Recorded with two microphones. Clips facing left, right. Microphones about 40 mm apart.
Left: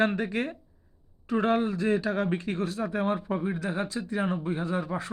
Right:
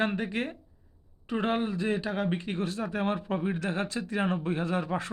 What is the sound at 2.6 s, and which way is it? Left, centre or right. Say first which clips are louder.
Speech: even; right.